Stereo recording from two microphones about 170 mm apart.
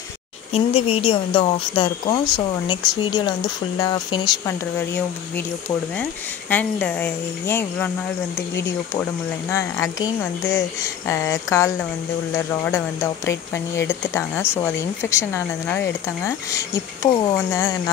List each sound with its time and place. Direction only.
0.5 s speech: 35° left (ahead or behind)
4.5 s speech: 15° left (ahead or behind)
6.5 s speech: 10° left (ahead or behind)
9.5 s speech: 15° left (ahead or behind)